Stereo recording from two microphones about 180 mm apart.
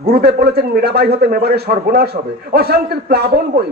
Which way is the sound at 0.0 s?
60° right (ahead or behind).